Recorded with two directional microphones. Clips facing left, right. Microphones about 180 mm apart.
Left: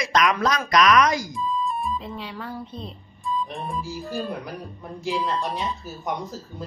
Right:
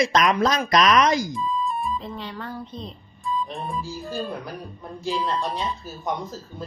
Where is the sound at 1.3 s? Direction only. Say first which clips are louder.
Even; centre (ahead or behind).